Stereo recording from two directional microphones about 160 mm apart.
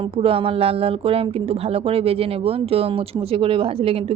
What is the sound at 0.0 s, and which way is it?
Speech, 35° right (ahead or behind).